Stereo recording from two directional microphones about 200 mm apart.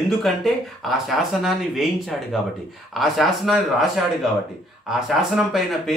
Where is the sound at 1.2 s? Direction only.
Centre (ahead or behind).